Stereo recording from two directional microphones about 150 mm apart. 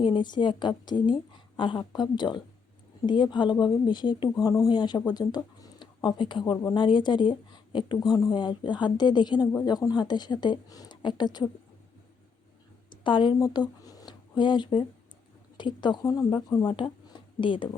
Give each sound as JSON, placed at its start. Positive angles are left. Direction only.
{"t": 0.0, "sound": "a woman's voice", "side_deg": 30}
{"t": 13.1, "sound": "speech", "side_deg": 35}